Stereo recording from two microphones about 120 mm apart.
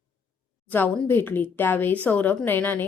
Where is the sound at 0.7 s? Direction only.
15° left (ahead or behind).